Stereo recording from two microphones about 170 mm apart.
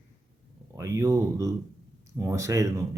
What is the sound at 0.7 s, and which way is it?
Speech, 20° right (ahead or behind).